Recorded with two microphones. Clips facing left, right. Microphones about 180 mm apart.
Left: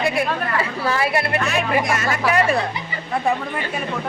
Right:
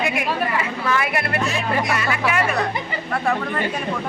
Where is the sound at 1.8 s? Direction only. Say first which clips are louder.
Left 1 dB; 45° left (ahead or behind).